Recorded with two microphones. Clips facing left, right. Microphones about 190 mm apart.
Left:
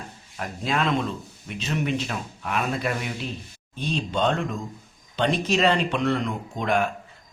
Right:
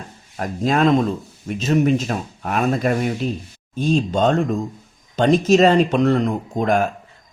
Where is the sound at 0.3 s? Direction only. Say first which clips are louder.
Right 8 dB; 45° right (ahead or behind).